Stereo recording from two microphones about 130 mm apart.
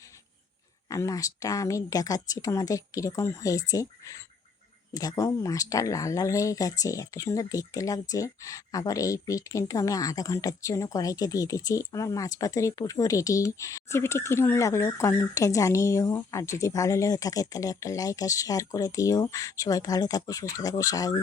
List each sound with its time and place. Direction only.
0.9 s speech: 25° left (ahead or behind)